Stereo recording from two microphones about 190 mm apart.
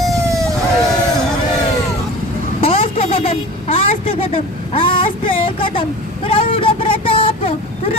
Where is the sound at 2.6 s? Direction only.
30° left (ahead or behind).